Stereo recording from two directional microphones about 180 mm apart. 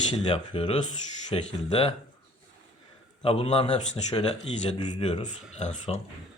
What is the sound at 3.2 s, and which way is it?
Speech, 30° left (ahead or behind).